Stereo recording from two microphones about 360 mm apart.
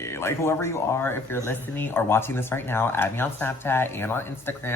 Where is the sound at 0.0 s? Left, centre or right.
Centre.